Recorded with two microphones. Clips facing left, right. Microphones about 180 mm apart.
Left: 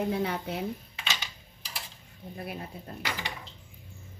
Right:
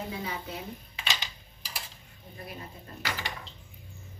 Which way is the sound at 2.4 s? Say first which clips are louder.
Left 4 dB; 65° left (ahead or behind).